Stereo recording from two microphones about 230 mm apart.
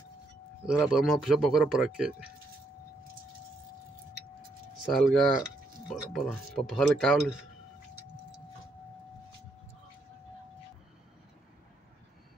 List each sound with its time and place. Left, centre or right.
0.7 s speech: centre
4.9 s speech: centre